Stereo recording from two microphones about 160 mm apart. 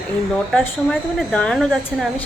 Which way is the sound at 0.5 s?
5° left (ahead or behind).